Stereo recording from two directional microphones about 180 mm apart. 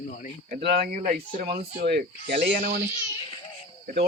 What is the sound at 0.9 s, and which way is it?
Speech, 45° right (ahead or behind).